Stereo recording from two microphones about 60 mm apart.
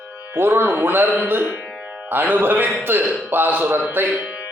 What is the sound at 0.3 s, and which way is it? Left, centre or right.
A man's voice, right.